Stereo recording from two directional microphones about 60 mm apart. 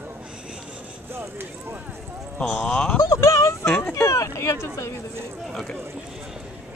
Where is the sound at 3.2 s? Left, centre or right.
Left.